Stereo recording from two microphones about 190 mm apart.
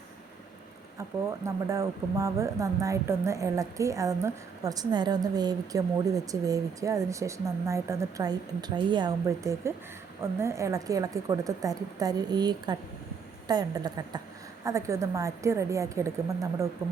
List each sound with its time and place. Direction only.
1.5 s a woman's voice: 15° right (ahead or behind)